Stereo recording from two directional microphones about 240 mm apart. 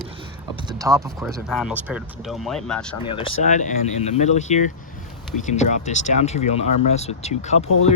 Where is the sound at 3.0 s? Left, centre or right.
Left.